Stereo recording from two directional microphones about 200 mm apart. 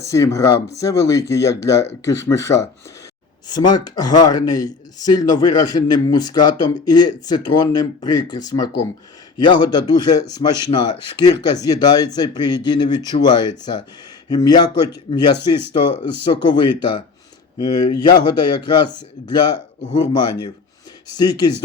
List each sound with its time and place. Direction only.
0.0 s speech: 15° left (ahead or behind)